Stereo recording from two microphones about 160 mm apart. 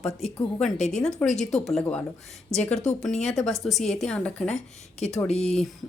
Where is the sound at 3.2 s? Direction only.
Centre (ahead or behind).